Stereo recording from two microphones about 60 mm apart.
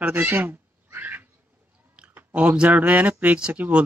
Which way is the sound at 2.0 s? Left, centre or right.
Right.